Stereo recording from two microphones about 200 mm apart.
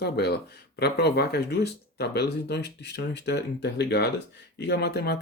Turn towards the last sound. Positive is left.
turn(degrees=55)  # may be behind; listen again after turning